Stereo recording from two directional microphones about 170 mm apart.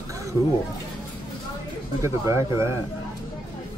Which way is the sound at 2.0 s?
15° right (ahead or behind).